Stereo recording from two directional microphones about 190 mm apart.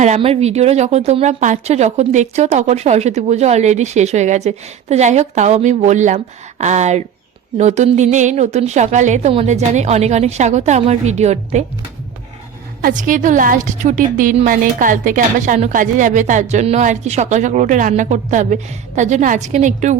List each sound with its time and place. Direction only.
0.0 s speech: 35° right (ahead or behind)
12.8 s a woman's voice: 45° right (ahead or behind)